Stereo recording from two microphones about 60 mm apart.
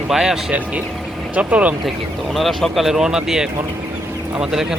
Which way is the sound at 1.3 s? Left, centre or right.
Right.